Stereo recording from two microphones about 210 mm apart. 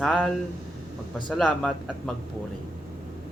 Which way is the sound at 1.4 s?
5° left (ahead or behind).